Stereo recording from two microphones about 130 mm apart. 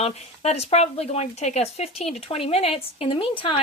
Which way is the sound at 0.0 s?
55° left (ahead or behind).